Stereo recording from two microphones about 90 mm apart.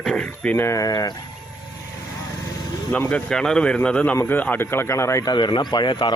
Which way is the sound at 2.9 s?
20° left (ahead or behind).